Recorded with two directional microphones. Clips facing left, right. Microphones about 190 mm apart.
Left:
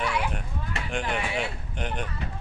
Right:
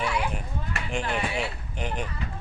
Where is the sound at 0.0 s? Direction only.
Centre (ahead or behind).